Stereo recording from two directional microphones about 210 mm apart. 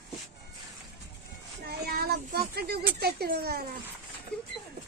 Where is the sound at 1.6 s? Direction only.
50° right (ahead or behind).